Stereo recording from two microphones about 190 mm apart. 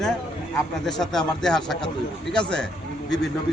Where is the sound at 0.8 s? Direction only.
Centre (ahead or behind).